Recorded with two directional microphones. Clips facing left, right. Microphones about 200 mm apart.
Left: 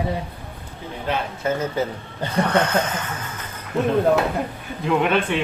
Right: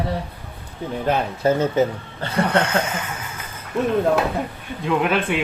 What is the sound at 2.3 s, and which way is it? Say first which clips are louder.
Speech: even; 10° right (ahead or behind).